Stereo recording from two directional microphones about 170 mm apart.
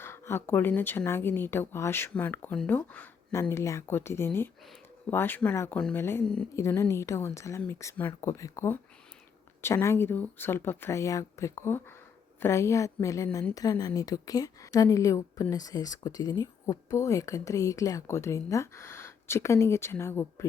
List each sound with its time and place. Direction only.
0.0 s a woman's voice: 15° left (ahead or behind)